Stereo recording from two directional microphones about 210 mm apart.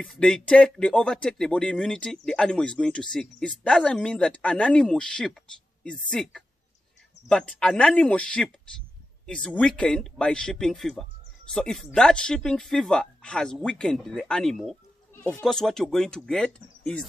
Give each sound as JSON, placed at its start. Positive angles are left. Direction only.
{"t": 0.0, "sound": "speech", "side_deg": 5}